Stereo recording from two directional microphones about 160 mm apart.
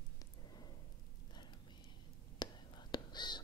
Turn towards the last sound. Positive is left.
turn(degrees=25)  # may be behind; listen again after turning